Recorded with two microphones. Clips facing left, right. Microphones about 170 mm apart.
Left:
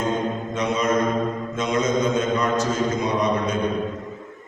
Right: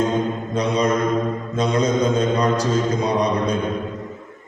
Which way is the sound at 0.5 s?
35° right (ahead or behind).